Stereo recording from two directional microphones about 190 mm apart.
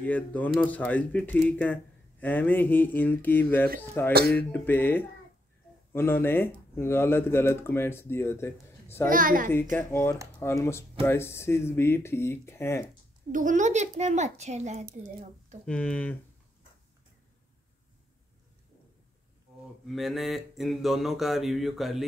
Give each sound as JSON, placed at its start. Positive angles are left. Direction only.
{"t": 0.0, "sound": "speech", "side_deg": 10}
{"t": 9.1, "sound": "a child's voice", "side_deg": -45}
{"t": 9.8, "sound": "speech", "side_deg": 10}
{"t": 13.3, "sound": "speech", "side_deg": -45}
{"t": 15.6, "sound": "speech", "side_deg": 5}
{"t": 19.9, "sound": "a sound", "side_deg": 0}